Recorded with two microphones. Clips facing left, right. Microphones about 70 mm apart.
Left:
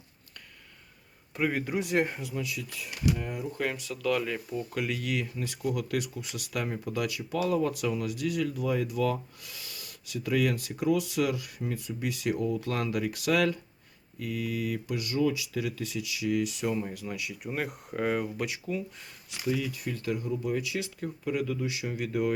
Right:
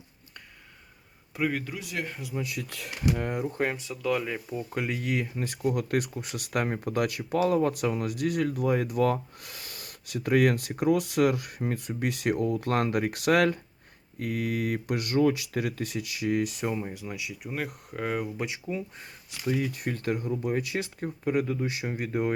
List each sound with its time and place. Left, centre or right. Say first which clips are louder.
1.3 s speech: even; centre
1.6 s speech: left 7 dB; left
2.4 s speech: right 3 dB; right
2.6 s speech: right 1 dB; right
3.2 s speech: right 5 dB; right
3.4 s speech: right 3 dB; right
3.9 s speech: even; centre
4.7 s speech: right 3 dB; right
16.7 s speech: even; centre
17.5 s speech: left 1 dB; centre
18.2 s speech: even; right
19.5 s speech: right 2 dB; right